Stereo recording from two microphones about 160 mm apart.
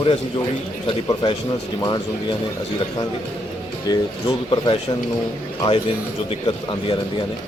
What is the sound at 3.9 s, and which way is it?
Speech, 25° left (ahead or behind).